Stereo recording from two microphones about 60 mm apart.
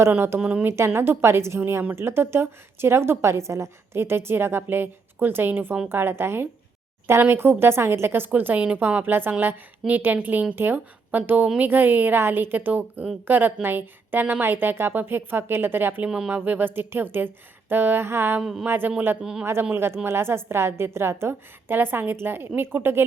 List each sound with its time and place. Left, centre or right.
0.3 s a woman's voice: right
0.6 s a woman's voice: right
8.5 s a woman's voice: right
16.0 s speech: centre
16.3 s a woman's voice: right
19.2 s speech: centre
19.7 s a woman's voice: right